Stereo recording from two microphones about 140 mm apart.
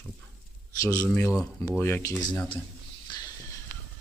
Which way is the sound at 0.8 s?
25° left (ahead or behind).